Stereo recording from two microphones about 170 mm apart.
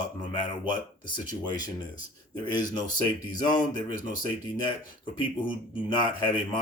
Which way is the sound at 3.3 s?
25° left (ahead or behind).